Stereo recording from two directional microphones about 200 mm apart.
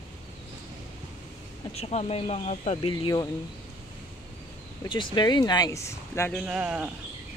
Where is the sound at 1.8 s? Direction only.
30° left (ahead or behind).